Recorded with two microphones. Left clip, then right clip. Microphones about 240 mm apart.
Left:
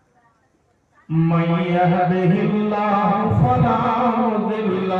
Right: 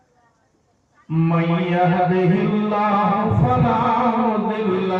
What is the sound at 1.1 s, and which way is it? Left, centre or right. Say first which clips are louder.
Mantra: even; left.